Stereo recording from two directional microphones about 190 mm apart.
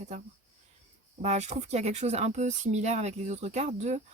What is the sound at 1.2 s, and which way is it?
Speech, 35° right (ahead or behind).